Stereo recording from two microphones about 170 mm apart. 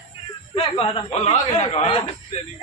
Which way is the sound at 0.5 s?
35° left (ahead or behind).